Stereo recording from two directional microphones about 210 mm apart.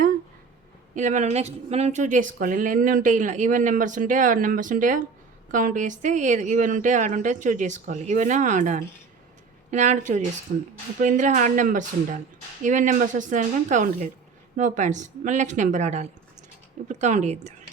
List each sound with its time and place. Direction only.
0.9 s speech: 35° right (ahead or behind)